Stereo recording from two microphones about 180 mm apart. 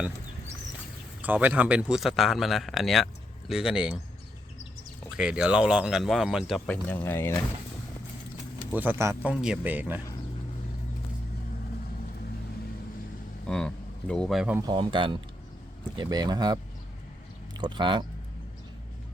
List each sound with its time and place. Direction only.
1.2 s a man's voice: 10° right (ahead or behind)
5.1 s a man's voice: 5° right (ahead or behind)
6.7 s speech: 10° left (ahead or behind)
8.7 s speech: 10° right (ahead or behind)
13.5 s speech: 5° left (ahead or behind)
14.7 s speech: 25° right (ahead or behind)
17.6 s speech: 25° right (ahead or behind)